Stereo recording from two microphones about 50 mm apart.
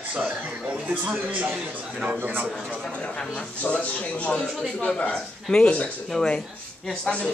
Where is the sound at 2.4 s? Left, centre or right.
Centre.